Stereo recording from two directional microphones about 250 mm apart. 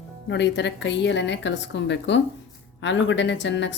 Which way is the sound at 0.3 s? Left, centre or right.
Left.